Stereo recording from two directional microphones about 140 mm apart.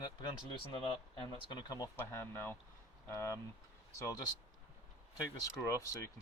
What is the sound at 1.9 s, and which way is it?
Speech, 15° left (ahead or behind).